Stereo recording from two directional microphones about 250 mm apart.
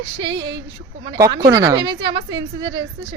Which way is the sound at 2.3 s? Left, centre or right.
Right.